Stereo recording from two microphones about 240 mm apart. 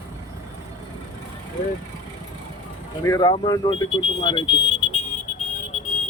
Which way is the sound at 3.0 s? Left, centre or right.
Centre.